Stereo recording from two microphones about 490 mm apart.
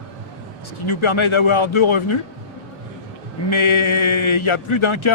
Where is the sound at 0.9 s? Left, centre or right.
Left.